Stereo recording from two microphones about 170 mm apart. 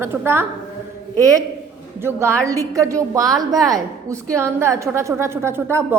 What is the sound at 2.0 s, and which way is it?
A woman's voice, 15° right (ahead or behind).